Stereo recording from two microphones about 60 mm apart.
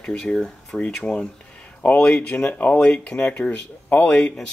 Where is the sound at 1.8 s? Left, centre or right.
Left.